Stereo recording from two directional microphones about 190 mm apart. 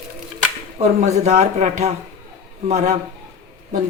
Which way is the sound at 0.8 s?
35° right (ahead or behind).